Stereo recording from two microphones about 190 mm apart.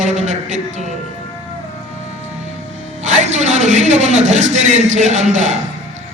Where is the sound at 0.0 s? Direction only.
40° right (ahead or behind).